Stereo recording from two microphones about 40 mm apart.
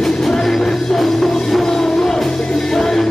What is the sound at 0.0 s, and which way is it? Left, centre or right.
Music, centre.